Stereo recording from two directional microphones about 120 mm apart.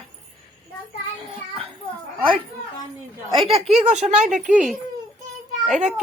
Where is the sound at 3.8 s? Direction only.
75° right (ahead or behind).